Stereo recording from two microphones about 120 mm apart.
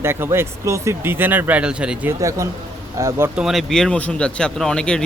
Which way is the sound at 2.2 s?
25° right (ahead or behind).